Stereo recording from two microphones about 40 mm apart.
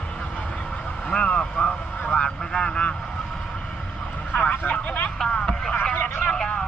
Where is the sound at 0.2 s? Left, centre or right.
Left.